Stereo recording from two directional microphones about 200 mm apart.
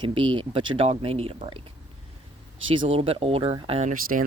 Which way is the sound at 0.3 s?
25° right (ahead or behind).